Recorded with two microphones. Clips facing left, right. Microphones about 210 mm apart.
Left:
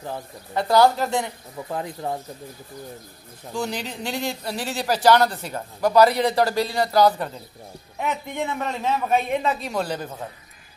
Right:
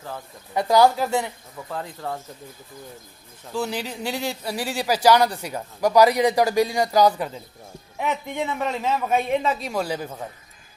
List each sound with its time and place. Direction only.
0.6 s a man's voice: 10° right (ahead or behind)
1.7 s speech: 20° left (ahead or behind)
3.5 s a man's voice: 5° right (ahead or behind)
8.5 s a man's voice: 10° right (ahead or behind)